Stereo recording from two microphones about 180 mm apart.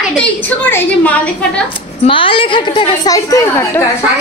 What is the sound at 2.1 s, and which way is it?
A woman's voice, 30° left (ahead or behind).